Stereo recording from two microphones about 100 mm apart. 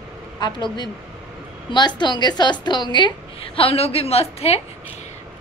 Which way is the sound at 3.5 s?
75° left (ahead or behind).